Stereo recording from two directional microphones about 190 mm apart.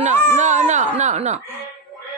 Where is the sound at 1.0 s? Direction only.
40° right (ahead or behind).